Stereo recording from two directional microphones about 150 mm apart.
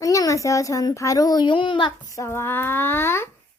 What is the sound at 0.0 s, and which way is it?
A woman's voice, 20° left (ahead or behind).